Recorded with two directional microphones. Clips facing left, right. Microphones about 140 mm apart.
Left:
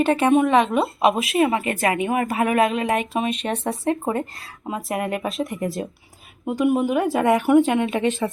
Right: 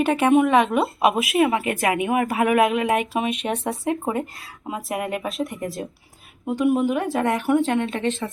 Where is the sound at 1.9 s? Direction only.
15° right (ahead or behind); by 8.1 s 5° left (ahead or behind).